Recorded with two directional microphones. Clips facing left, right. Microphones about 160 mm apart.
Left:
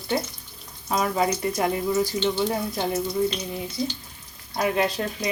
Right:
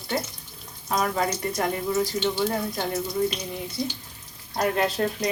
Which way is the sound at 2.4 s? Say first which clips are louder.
Left 1 dB; 15° left (ahead or behind).